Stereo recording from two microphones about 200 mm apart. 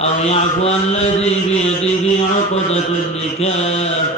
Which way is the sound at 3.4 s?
30° left (ahead or behind).